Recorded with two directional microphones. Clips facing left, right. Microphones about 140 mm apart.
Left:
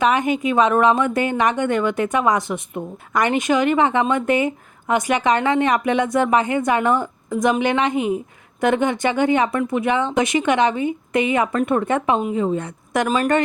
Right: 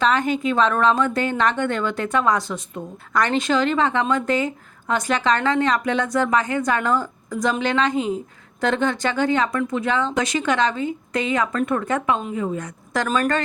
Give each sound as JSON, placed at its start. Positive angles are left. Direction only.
{"t": 0.0, "sound": "a woman's voice", "side_deg": 15}